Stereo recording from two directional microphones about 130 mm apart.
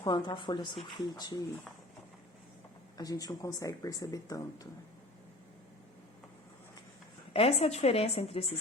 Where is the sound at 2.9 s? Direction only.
30° left (ahead or behind).